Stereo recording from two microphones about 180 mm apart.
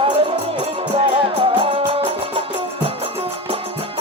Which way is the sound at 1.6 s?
30° right (ahead or behind).